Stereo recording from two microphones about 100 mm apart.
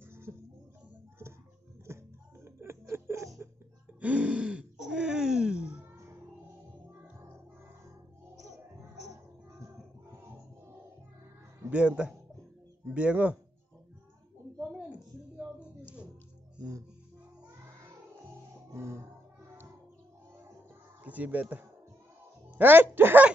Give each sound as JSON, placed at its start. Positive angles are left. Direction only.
{"t": 0.1, "sound": "music", "side_deg": -25}
{"t": 2.4, "sound": "music", "side_deg": -25}
{"t": 4.0, "sound": "throat clearing", "side_deg": -15}
{"t": 6.9, "sound": "music", "side_deg": -15}
{"t": 8.4, "sound": "music", "side_deg": -35}
{"t": 11.7, "sound": "a man's voice", "side_deg": -15}
{"t": 14.8, "sound": "a sound", "side_deg": -10}
{"t": 16.5, "sound": "music", "side_deg": -40}
{"t": 18.7, "sound": "music", "side_deg": -30}
{"t": 21.0, "sound": "a sound", "side_deg": -15}
{"t": 22.6, "sound": "speech", "side_deg": -20}